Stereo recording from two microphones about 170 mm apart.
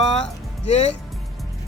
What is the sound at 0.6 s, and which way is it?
Speech, 40° left (ahead or behind).